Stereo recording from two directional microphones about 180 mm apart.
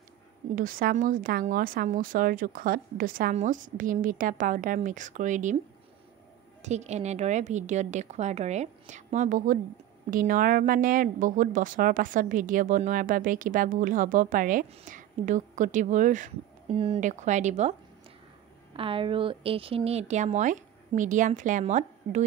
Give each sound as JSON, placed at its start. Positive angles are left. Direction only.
{"t": 0.6, "sound": "speech", "side_deg": -50}
{"t": 6.6, "sound": "a woman's voice", "side_deg": -40}
{"t": 16.7, "sound": "a woman's voice", "side_deg": -30}
{"t": 18.7, "sound": "a woman's voice", "side_deg": -30}